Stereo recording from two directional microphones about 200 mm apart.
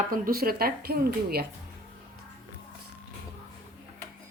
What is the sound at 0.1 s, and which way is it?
Speech, 45° right (ahead or behind).